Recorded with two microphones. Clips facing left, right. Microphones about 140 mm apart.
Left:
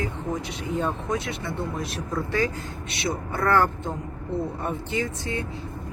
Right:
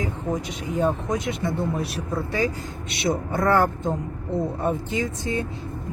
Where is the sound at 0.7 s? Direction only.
15° right (ahead or behind).